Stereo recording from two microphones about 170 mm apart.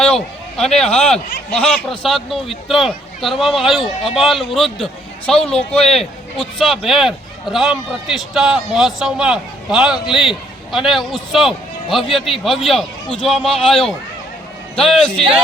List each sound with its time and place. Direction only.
0.0 s a sound: 5° left (ahead or behind)
0.9 s speech: 35° left (ahead or behind)
1.1 s a man's voice: 5° left (ahead or behind)